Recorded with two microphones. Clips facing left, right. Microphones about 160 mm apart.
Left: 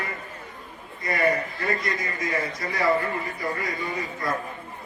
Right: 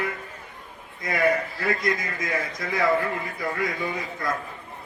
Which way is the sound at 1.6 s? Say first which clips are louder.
Right 3 dB; 90° right.